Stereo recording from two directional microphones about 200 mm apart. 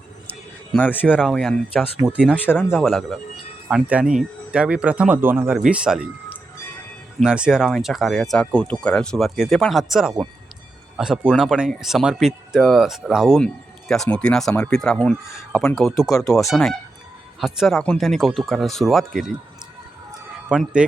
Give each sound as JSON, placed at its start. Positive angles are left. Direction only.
{"t": 0.7, "sound": "speech", "side_deg": 10}
{"t": 16.0, "sound": "speech", "side_deg": 15}
{"t": 16.5, "sound": "speech", "side_deg": 0}
{"t": 20.5, "sound": "speech", "side_deg": -5}